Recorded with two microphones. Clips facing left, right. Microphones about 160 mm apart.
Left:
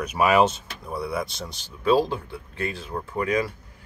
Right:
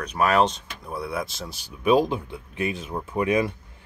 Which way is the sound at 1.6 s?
15° right (ahead or behind).